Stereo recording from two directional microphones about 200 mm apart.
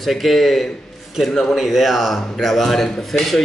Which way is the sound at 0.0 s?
Centre (ahead or behind).